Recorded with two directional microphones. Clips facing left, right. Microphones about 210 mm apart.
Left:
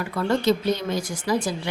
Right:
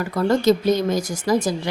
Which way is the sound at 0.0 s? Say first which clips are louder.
Right 4 dB; 40° right (ahead or behind).